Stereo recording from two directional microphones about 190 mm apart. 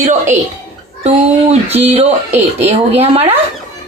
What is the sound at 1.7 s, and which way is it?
Speech, 35° right (ahead or behind).